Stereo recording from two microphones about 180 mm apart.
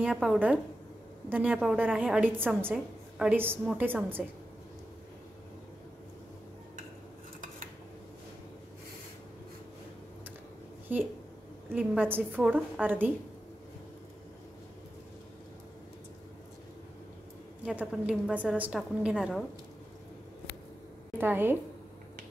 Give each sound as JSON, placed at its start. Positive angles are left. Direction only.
{"t": 0.0, "sound": "a woman's voice", "side_deg": -5}
{"t": 11.7, "sound": "a woman's voice", "side_deg": -10}
{"t": 17.6, "sound": "a woman's voice", "side_deg": -5}
{"t": 21.2, "sound": "a woman's voice", "side_deg": -10}